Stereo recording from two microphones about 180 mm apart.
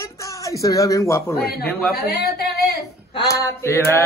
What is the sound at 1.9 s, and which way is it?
Speech, 60° left (ahead or behind).